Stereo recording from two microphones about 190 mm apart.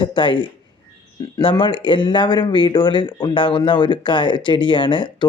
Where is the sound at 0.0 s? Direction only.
25° left (ahead or behind).